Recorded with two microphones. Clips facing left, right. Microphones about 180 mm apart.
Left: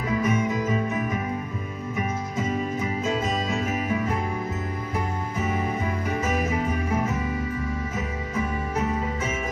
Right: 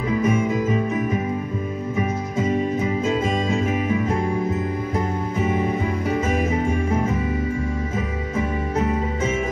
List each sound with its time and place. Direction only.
0.2 s music: 30° right (ahead or behind)
3.4 s music: 30° right (ahead or behind)
6.2 s music: 30° right (ahead or behind)